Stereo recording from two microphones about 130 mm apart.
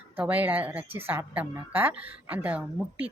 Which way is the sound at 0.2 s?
10° right (ahead or behind).